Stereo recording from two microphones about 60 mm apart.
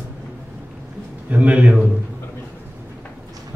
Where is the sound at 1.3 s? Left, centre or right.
Right.